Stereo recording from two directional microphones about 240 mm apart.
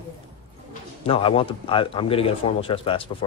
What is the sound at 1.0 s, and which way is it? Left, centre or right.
Speech, left.